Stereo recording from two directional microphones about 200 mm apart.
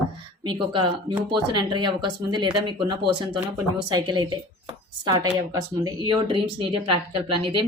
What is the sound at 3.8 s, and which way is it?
Speech, 20° right (ahead or behind).